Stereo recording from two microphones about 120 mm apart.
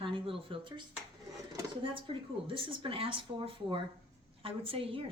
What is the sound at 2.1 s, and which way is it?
Speech, 45° right (ahead or behind).